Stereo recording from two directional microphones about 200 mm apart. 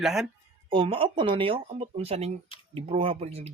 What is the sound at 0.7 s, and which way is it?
Speech, 25° right (ahead or behind).